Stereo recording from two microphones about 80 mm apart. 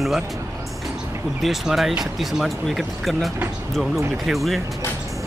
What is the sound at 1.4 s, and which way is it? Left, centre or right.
Speech, centre.